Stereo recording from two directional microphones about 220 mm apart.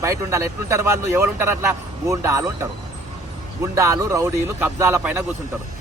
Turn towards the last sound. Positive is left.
turn(degrees=-10)  # may be behind; listen again after turning